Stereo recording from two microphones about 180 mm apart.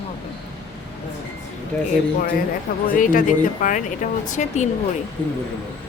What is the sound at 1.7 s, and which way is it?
Speech, 10° left (ahead or behind).